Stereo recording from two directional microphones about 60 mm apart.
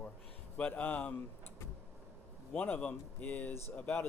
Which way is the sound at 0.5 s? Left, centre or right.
Left.